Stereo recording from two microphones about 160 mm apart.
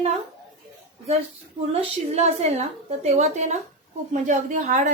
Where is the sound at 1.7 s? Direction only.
40° right (ahead or behind).